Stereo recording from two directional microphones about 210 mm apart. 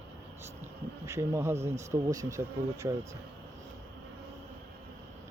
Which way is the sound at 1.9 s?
15° right (ahead or behind).